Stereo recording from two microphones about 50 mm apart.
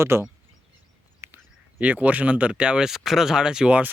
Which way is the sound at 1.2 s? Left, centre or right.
Right.